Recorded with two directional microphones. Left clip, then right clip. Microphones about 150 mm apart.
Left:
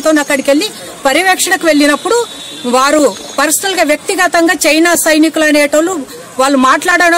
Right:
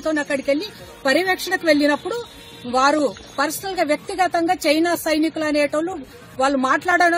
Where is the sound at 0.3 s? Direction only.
35° left (ahead or behind).